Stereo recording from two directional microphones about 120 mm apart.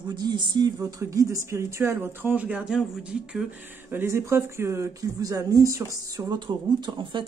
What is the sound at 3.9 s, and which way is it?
Speech, 20° right (ahead or behind).